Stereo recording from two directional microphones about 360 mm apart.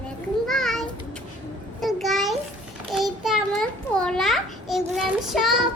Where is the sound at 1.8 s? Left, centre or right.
Centre.